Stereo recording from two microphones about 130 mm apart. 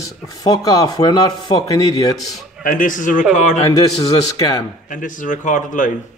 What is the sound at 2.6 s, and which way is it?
Speech, 90° left.